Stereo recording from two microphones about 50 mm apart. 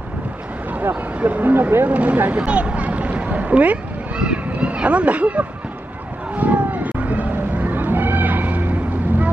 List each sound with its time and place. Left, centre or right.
1.2 s speech: right
1.9 s speech: right
6.3 s cat: right